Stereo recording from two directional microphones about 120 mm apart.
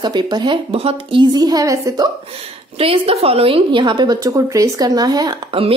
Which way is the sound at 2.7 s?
55° right (ahead or behind).